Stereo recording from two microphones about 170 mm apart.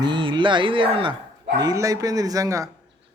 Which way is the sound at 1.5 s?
20° right (ahead or behind).